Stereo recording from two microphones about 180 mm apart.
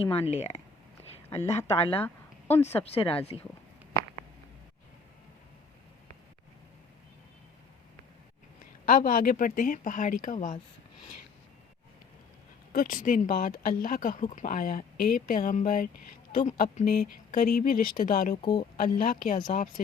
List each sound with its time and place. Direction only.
0.0 s speech: 35° left (ahead or behind)
1.4 s speech: 15° left (ahead or behind)
1.7 s speech: 35° left (ahead or behind)
2.0 s a sound: 10° left (ahead or behind)
2.7 s speech: 35° left (ahead or behind)
8.9 s speech: 50° left (ahead or behind)
12.7 s speech: 50° left (ahead or behind)